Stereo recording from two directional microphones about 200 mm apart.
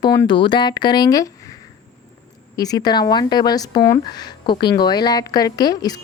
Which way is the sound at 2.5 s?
20° left (ahead or behind).